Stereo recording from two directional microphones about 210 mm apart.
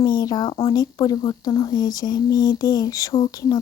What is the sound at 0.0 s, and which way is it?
Speech, 20° left (ahead or behind).